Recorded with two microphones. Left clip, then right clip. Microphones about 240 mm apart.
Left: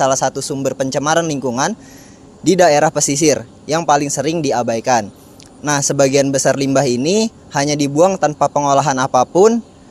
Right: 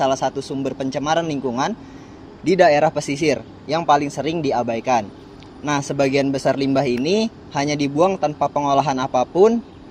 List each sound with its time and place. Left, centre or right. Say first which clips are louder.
0.0 s speech: left 4 dB; left